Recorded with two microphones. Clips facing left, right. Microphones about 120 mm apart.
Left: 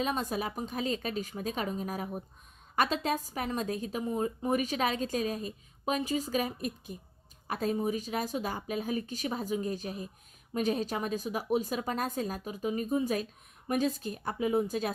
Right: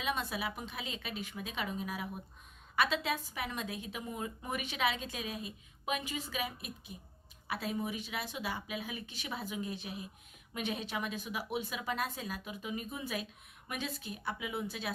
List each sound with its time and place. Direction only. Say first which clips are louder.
0.0 s a woman's voice: left 5 dB; 40° left (ahead or behind)